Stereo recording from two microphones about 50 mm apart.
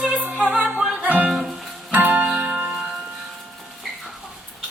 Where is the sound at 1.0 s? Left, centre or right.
Right.